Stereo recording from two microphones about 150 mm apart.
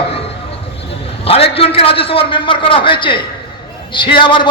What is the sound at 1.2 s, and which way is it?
A man's voice, 40° left (ahead or behind).